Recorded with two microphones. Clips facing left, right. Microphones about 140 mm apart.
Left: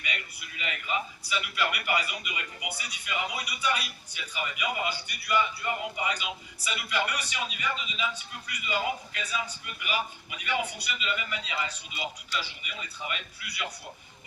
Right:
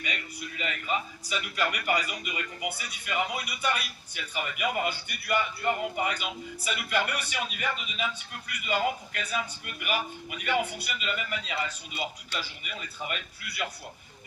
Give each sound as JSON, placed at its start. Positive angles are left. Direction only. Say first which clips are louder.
{"t": 0.0, "sound": "a man's voice", "louder": "right 2 dB", "side_deg": -40}